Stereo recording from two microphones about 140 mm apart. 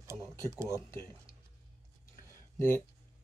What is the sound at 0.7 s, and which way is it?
Speech, 20° left (ahead or behind).